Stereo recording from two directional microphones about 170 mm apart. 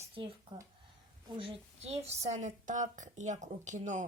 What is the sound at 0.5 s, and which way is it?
Speech, 25° right (ahead or behind).